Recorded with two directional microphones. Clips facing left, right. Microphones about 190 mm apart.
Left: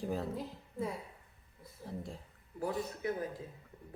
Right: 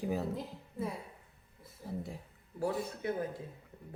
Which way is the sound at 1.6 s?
5° right (ahead or behind).